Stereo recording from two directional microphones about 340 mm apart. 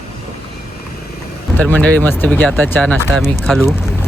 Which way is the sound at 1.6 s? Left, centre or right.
Centre.